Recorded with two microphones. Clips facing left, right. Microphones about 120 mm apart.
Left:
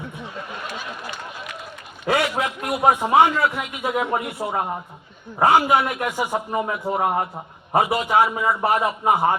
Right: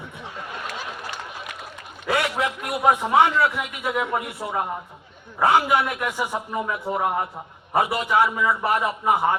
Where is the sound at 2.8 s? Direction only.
55° left (ahead or behind).